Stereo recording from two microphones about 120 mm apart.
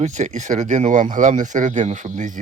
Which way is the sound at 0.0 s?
75° right (ahead or behind).